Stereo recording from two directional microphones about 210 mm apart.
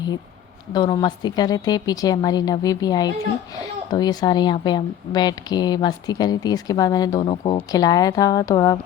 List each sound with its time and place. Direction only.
0.7 s a woman's voice: 20° left (ahead or behind)